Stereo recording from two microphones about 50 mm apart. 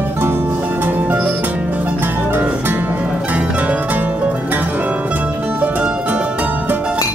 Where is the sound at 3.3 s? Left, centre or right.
Right.